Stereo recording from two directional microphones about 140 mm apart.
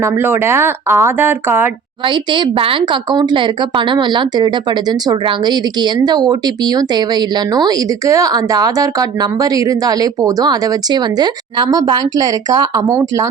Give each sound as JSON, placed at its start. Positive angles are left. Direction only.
{"t": 0.0, "sound": "speech", "side_deg": -15}
{"t": 2.0, "sound": "a woman's voice", "side_deg": -35}